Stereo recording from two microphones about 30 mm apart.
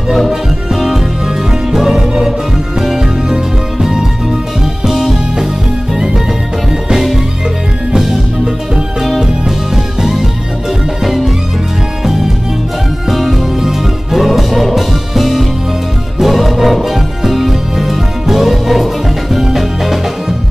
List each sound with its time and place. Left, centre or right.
0.3 s music: centre
7.9 s music: centre
11.1 s music: centre
13.1 s music: centre
16.6 s music: centre